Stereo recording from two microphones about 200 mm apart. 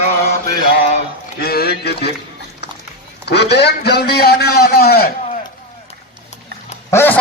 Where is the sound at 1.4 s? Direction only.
50° left (ahead or behind).